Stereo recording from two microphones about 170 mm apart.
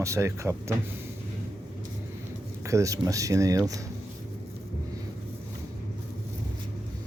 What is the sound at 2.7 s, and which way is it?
Speech, 20° right (ahead or behind).